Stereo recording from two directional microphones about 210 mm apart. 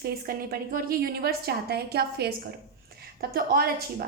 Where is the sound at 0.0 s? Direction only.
45° right (ahead or behind).